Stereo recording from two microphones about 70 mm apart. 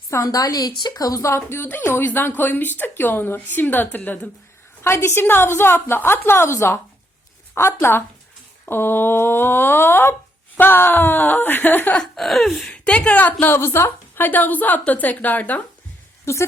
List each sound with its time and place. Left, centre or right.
0.1 s a woman's voice: left
4.8 s a woman's voice: left
11.9 s a sound: centre
12.7 s a woman's voice: centre
13.4 s a woman's voice: left
16.2 s a woman's voice: left